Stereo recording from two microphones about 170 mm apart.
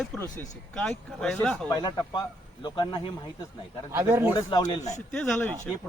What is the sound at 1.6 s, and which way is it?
Speech, 20° left (ahead or behind).